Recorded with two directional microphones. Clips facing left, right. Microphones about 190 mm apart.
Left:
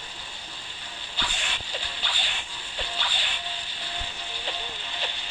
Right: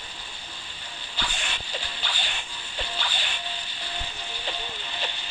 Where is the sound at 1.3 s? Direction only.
45° right (ahead or behind).